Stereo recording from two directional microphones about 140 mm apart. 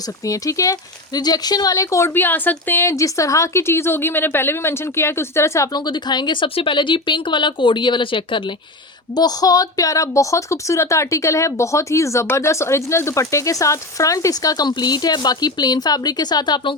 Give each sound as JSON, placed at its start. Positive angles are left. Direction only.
{"t": 0.3, "sound": "speech", "side_deg": 25}